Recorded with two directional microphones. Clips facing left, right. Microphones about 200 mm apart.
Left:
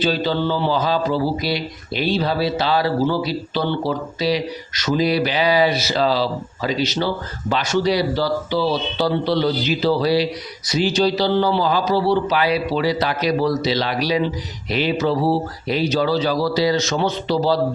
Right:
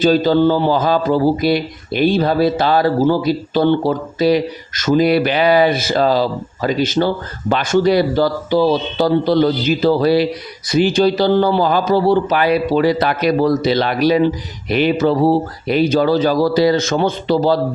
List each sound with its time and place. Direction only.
0.0 s a man's voice: 45° right (ahead or behind)